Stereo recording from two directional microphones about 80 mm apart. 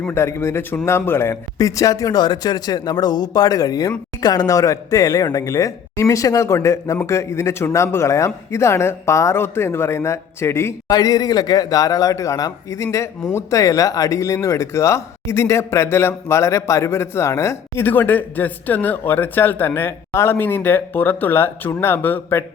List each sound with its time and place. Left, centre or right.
0.1 s speech: left
1.5 s speech: left
2.2 s speech: left
10.8 s speech: left